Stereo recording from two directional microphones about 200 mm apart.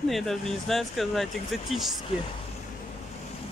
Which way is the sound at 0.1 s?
Centre (ahead or behind).